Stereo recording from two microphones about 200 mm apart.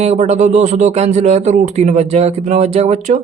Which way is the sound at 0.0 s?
35° right (ahead or behind).